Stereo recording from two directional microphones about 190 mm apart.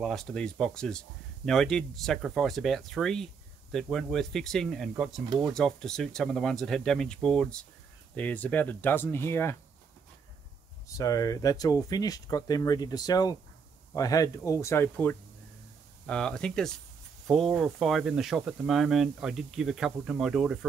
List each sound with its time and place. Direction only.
0.0 s speech: centre (ahead or behind)
10.9 s speech: 15° left (ahead or behind); by 20.5 s 5° right (ahead or behind)